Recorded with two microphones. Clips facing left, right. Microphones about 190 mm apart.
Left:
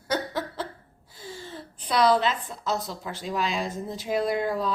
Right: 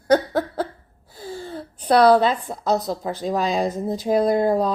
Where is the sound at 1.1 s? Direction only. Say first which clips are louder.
Right 7 dB; 40° right (ahead or behind).